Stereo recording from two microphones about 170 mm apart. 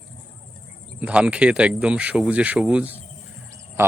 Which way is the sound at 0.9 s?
10° right (ahead or behind).